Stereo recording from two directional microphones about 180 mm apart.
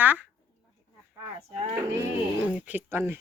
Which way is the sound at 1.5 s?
40° right (ahead or behind).